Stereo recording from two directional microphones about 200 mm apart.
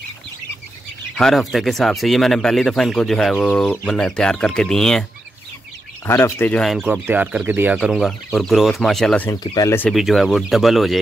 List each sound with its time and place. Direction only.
1.1 s speech: centre (ahead or behind)
6.0 s speech: 10° left (ahead or behind)
9.4 s speech: 20° left (ahead or behind)
9.8 s speech: centre (ahead or behind)